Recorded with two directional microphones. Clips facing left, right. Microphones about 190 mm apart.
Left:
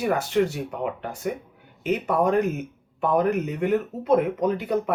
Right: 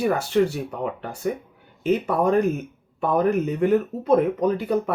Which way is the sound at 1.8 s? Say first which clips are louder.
Right 2 dB; 35° right (ahead or behind).